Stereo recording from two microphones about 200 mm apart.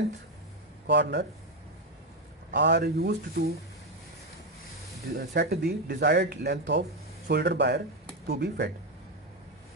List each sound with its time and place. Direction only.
0.8 s speech: 60° right (ahead or behind)
2.5 s speech: 60° right (ahead or behind)
5.1 s speech: 55° right (ahead or behind)